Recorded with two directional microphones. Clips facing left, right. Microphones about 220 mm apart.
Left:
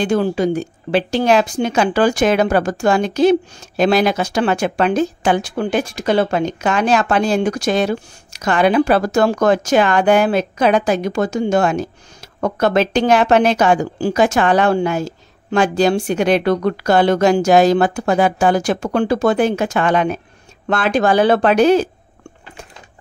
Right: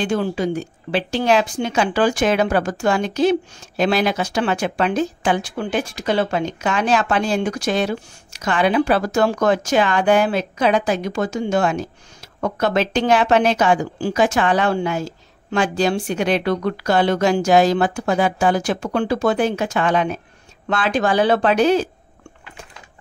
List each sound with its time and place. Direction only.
0.0 s speech: 40° left (ahead or behind)